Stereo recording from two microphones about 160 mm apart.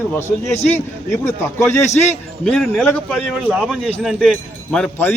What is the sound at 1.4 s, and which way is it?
Speech, 15° left (ahead or behind).